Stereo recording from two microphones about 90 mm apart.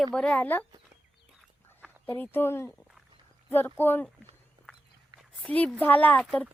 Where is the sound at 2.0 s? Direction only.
25° left (ahead or behind).